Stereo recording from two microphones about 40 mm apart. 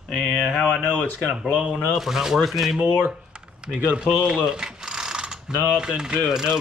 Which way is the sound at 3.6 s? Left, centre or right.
Right.